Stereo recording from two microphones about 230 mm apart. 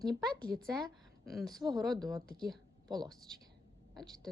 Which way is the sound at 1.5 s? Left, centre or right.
Centre.